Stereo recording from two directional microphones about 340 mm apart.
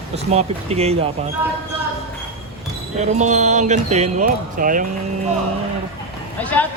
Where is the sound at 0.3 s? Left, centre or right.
Centre.